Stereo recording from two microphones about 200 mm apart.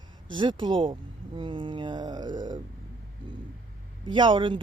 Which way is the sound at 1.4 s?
25° right (ahead or behind).